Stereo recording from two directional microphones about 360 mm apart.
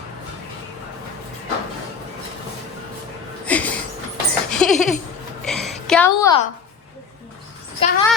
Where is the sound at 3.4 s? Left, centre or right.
Centre.